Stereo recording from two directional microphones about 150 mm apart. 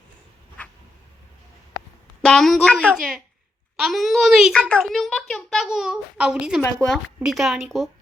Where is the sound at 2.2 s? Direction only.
Centre (ahead or behind).